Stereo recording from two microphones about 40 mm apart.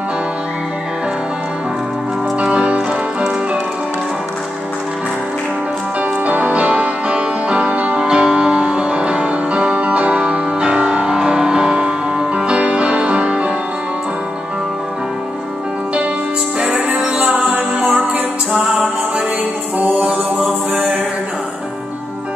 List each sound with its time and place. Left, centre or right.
2.4 s music: right
6.2 s music: right
7.9 s music: centre
16.5 s music: right
18.5 s music: right